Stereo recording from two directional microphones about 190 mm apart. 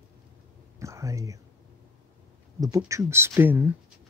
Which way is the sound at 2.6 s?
15° right (ahead or behind).